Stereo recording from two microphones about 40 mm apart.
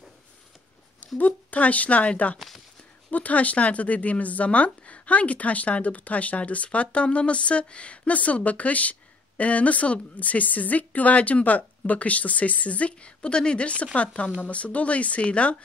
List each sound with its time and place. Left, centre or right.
1.0 s speech: left